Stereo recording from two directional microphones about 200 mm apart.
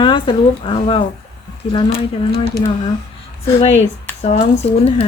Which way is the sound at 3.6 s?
30° left (ahead or behind).